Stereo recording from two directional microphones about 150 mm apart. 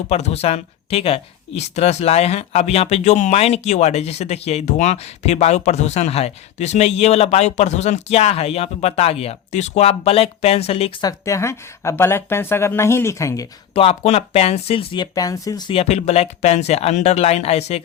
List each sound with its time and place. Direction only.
0.1 s speech: 45° left (ahead or behind)
11.0 s speech: 20° left (ahead or behind)
13.7 s speech: 45° left (ahead or behind)
15.8 s speech: 45° left (ahead or behind)